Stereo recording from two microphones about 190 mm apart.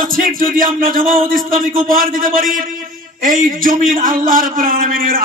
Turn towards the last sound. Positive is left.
turn(degrees=-50)  # may be behind; listen again after turning